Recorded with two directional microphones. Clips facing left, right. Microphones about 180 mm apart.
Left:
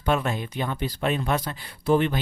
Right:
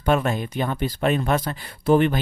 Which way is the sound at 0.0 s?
50° right (ahead or behind).